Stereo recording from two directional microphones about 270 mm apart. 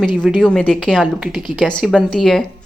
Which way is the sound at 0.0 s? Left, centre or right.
Centre.